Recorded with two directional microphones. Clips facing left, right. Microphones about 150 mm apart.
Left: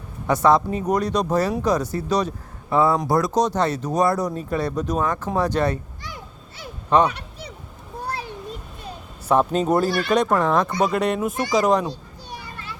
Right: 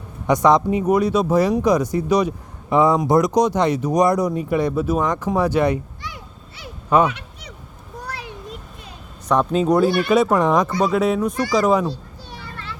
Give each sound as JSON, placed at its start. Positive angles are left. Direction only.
{"t": 0.4, "sound": "speech", "side_deg": -15}
{"t": 6.9, "sound": "speech", "side_deg": -10}
{"t": 8.0, "sound": "a sound", "side_deg": 30}
{"t": 9.3, "sound": "speech", "side_deg": 0}
{"t": 10.8, "sound": "speech", "side_deg": 0}
{"t": 11.9, "sound": "children playing", "side_deg": 15}